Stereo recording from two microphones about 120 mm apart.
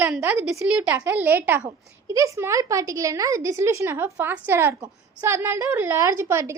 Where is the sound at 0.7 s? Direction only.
15° right (ahead or behind).